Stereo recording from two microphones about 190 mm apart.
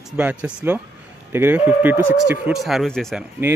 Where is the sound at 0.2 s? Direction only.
5° right (ahead or behind).